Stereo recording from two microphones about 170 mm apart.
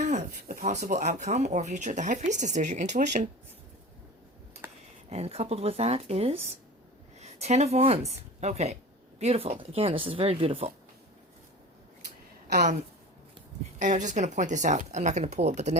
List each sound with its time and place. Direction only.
0.0 s speech: 45° right (ahead or behind)
4.6 s a sound: 15° right (ahead or behind)
5.0 s speech: 40° right (ahead or behind)
13.7 s speech: 45° right (ahead or behind)